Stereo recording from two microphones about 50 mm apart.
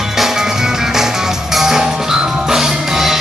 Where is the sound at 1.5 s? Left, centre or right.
Centre.